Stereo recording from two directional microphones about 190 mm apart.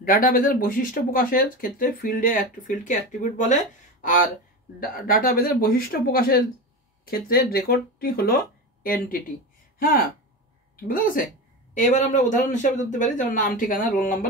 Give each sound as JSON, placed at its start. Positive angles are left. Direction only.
{"t": 0.0, "sound": "speech", "side_deg": 50}